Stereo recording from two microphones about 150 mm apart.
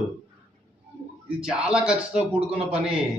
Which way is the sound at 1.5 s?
5° right (ahead or behind).